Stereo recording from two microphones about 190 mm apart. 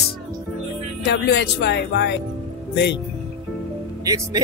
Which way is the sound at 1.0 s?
65° left (ahead or behind).